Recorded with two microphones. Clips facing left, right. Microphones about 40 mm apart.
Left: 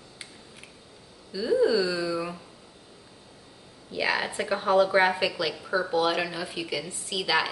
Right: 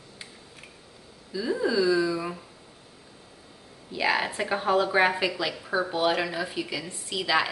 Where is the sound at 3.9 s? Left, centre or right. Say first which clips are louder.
Right 1 dB; centre.